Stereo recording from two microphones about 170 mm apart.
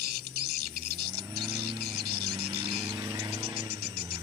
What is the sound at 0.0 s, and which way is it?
Bird, 65° right (ahead or behind).